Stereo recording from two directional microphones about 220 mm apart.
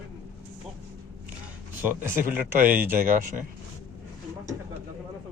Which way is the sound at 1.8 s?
10° right (ahead or behind).